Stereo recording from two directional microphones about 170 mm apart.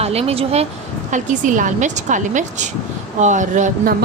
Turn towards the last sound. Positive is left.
turn(degrees=-45)  # may be behind; listen again after turning